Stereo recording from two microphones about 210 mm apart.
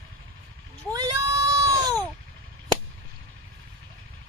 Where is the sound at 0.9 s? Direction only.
15° right (ahead or behind).